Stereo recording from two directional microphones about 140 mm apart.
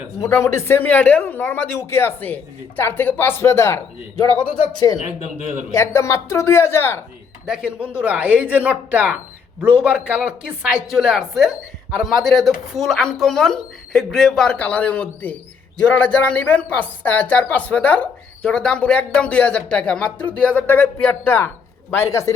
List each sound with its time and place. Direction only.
0.2 s speech: 20° left (ahead or behind)
4.9 s speech: 55° left (ahead or behind)
5.7 s speech: 20° left (ahead or behind)
7.4 s speech: 5° right (ahead or behind); by 22.4 s 20° left (ahead or behind)